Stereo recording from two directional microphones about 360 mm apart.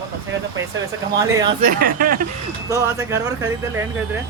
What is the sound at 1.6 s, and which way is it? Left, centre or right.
Speech, right.